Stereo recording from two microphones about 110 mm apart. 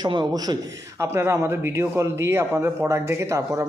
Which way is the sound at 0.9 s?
25° right (ahead or behind).